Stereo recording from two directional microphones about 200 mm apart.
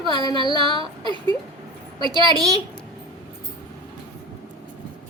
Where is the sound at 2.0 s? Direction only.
25° right (ahead or behind).